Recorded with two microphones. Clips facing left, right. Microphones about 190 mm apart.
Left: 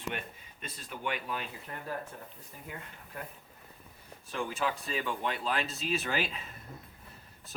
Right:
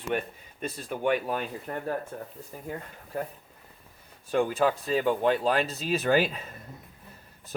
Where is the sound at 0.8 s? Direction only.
45° right (ahead or behind).